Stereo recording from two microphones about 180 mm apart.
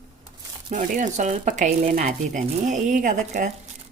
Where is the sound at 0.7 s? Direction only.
40° right (ahead or behind).